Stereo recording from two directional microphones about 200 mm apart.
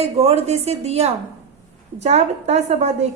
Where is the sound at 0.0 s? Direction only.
30° right (ahead or behind).